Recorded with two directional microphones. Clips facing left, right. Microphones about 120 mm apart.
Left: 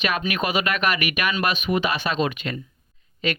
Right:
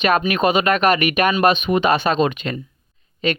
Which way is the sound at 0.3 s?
30° right (ahead or behind).